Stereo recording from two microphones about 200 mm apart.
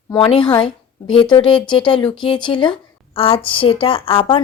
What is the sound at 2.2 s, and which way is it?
A woman's voice, 25° left (ahead or behind).